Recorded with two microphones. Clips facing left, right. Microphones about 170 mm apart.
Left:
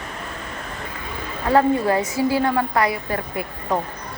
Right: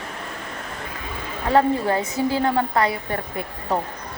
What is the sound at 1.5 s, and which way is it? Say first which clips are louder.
Speech: left 1 dB; 25° right (ahead or behind).